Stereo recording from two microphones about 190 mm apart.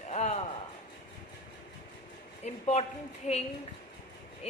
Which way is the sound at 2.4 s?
35° left (ahead or behind).